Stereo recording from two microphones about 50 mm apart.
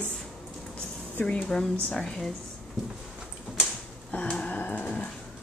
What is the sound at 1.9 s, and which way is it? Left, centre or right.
Speech, centre.